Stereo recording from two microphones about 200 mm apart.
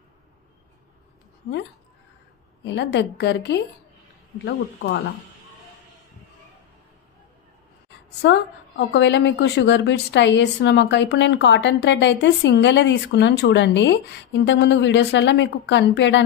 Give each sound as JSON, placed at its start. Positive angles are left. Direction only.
{"t": 2.6, "sound": "a woman's voice", "side_deg": 60}
{"t": 8.2, "sound": "a woman's voice", "side_deg": 60}